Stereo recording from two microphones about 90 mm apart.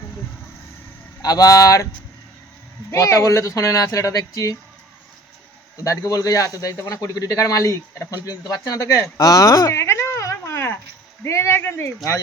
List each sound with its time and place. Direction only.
1.2 s a man's voice: 45° left (ahead or behind)
2.9 s a man's voice: 35° left (ahead or behind)
5.7 s a man's voice: 35° left (ahead or behind)
9.6 s a sound: 30° left (ahead or behind)
11.2 s speech: 30° left (ahead or behind)